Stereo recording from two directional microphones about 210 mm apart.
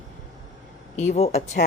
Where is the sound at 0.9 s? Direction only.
30° left (ahead or behind).